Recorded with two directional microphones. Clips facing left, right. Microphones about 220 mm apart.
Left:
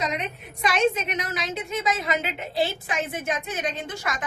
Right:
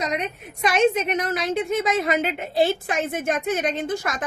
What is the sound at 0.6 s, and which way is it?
A woman's voice, 50° right (ahead or behind).